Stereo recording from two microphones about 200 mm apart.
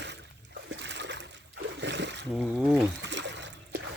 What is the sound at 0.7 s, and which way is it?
Splash, 60° right (ahead or behind).